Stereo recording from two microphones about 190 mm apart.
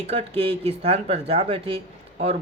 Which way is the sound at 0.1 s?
35° right (ahead or behind).